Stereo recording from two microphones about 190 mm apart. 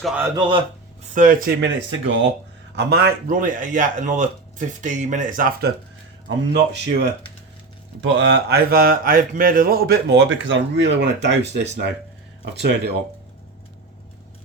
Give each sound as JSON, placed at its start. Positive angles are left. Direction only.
{"t": 0.0, "sound": "speech", "side_deg": -5}
{"t": 0.3, "sound": "speech", "side_deg": -25}
{"t": 1.1, "sound": "speech", "side_deg": -45}
{"t": 1.6, "sound": "speech", "side_deg": -75}
{"t": 2.7, "sound": "speech", "side_deg": -55}
{"t": 6.2, "sound": "speech", "side_deg": -65}